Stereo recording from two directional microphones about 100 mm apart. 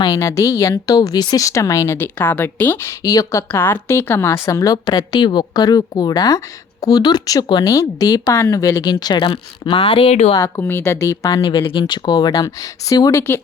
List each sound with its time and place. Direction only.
0.1 s speech: 30° left (ahead or behind)
2.1 s speech: 20° left (ahead or behind)
2.8 s speech: 35° left (ahead or behind)
3.5 s speech: 20° left (ahead or behind)
4.9 s speech: 50° left (ahead or behind); by 10.3 s 75° left (ahead or behind)
10.3 s speech: 25° left (ahead or behind)
11.4 s speech: 55° left (ahead or behind); by 13.4 s 25° left (ahead or behind)